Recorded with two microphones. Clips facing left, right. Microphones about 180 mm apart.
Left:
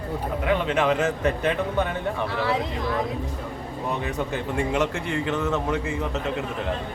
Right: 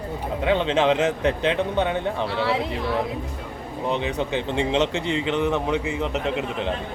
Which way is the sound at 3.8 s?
20° right (ahead or behind).